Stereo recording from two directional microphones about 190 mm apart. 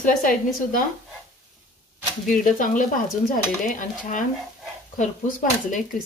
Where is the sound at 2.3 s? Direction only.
45° left (ahead or behind).